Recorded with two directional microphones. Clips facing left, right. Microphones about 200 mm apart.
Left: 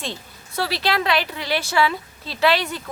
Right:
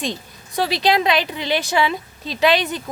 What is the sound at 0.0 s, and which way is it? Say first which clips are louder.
Speech: right 5 dB; 15° right (ahead or behind).